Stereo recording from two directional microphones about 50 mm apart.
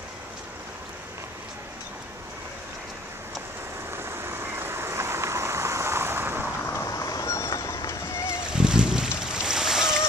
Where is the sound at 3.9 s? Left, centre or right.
Right.